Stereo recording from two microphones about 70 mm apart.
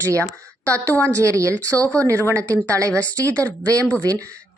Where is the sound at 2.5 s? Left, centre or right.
Right.